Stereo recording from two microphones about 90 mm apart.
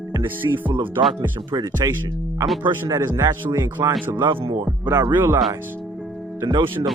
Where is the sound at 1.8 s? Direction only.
45° right (ahead or behind).